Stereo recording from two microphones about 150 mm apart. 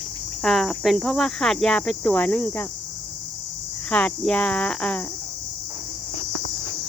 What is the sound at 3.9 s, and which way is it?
Speech, 10° left (ahead or behind).